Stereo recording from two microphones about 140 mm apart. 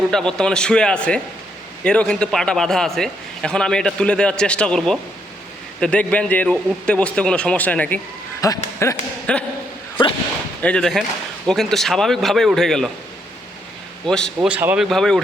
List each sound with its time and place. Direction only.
0.1 s a man's voice: 5° left (ahead or behind)
8.4 s speech: 25° left (ahead or behind)
9.3 s a man's voice: 10° left (ahead or behind)
10.6 s a man's voice: 5° left (ahead or behind)
14.1 s a man's voice: 5° left (ahead or behind)
14.3 s speech: 10° right (ahead or behind)
14.8 s a man's voice: 5° left (ahead or behind)